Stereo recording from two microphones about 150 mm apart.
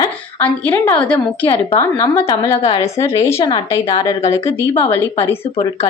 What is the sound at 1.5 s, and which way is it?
Speech, 35° left (ahead or behind).